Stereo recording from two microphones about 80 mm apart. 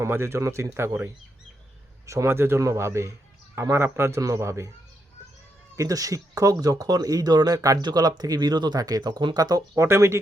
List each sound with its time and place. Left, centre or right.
0.0 s a man's voice: right
2.0 s a man's voice: right
5.7 s speech: right
9.8 s a man's voice: right